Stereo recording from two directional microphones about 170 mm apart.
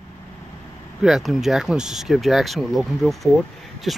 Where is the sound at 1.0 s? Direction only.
Centre (ahead or behind).